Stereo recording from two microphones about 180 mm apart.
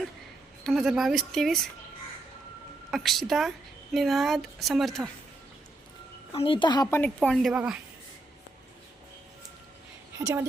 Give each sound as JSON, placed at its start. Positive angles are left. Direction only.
{"t": 0.6, "sound": "speech", "side_deg": 0}
{"t": 2.9, "sound": "speech", "side_deg": 0}
{"t": 6.3, "sound": "speech", "side_deg": 30}
{"t": 6.9, "sound": "speech", "side_deg": 5}
{"t": 10.2, "sound": "a woman's voice", "side_deg": -20}